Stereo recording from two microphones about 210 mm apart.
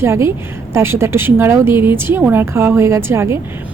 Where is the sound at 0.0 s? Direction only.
10° right (ahead or behind).